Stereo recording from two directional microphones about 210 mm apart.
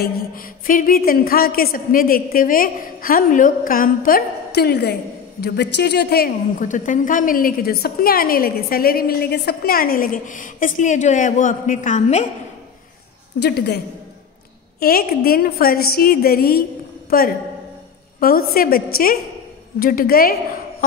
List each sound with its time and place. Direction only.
0.0 s a woman's voice: 40° left (ahead or behind)
13.4 s a woman's voice: 50° left (ahead or behind)
14.8 s a woman's voice: 45° left (ahead or behind)
19.8 s a woman's voice: 45° left (ahead or behind)